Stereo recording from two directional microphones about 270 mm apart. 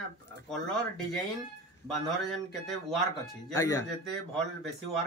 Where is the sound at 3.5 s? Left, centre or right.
Centre.